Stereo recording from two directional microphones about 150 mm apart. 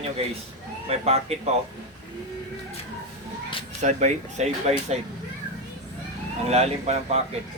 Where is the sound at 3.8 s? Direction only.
50° right (ahead or behind).